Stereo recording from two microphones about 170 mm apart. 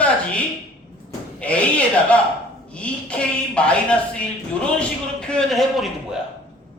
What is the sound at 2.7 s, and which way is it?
A woman's voice, 5° left (ahead or behind).